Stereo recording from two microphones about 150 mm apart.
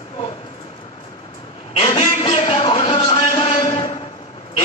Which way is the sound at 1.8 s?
40° left (ahead or behind).